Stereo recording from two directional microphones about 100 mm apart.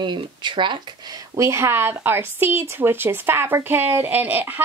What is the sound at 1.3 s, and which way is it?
Speech, 30° right (ahead or behind).